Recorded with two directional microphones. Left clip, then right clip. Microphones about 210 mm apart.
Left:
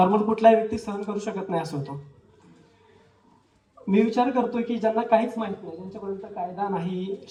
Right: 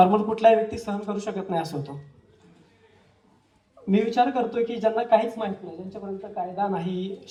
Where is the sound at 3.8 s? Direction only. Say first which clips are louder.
Right 1 dB; 15° right (ahead or behind).